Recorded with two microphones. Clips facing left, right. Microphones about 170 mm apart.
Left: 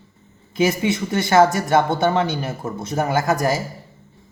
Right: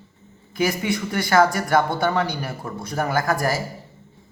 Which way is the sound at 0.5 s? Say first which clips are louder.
Left 3 dB; 20° left (ahead or behind).